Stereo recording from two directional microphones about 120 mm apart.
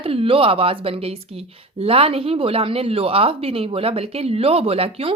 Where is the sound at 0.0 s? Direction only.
50° right (ahead or behind).